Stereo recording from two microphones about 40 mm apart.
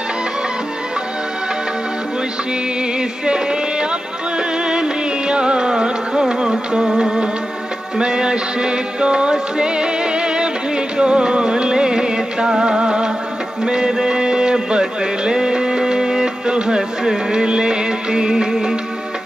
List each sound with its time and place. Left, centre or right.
3.0 s music: centre